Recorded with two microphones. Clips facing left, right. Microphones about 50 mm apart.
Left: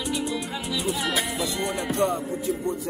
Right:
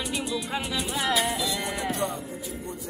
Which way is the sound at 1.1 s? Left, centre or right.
Left.